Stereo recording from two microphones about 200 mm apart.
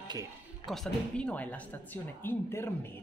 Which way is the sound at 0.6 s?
Centre (ahead or behind).